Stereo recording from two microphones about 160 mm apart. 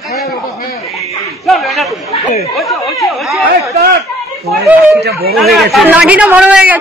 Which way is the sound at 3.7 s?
70° right (ahead or behind).